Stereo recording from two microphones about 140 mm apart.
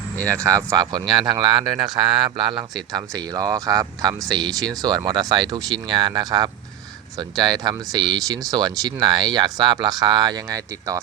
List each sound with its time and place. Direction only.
0.5 s speech: 25° right (ahead or behind)